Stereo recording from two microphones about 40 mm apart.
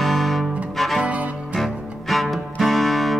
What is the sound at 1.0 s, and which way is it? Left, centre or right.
Music, right.